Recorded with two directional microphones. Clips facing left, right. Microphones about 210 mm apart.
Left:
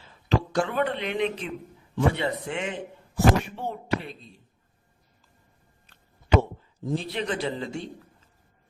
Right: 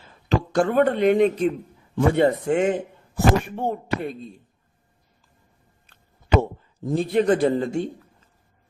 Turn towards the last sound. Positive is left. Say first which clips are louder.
# right 9 dB
turn(degrees=-50)  # may be behind; listen again after turning